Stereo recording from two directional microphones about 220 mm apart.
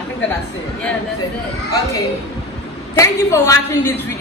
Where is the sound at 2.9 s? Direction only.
10° left (ahead or behind).